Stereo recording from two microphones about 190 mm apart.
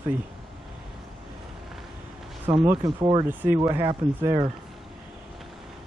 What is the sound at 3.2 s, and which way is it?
Speech, 10° right (ahead or behind).